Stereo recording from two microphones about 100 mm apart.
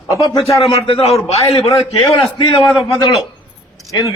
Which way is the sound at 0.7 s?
75° left (ahead or behind).